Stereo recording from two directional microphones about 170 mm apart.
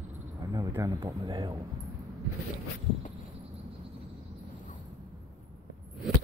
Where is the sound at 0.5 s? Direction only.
20° right (ahead or behind).